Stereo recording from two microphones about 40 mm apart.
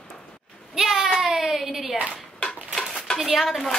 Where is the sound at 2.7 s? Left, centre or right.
Centre.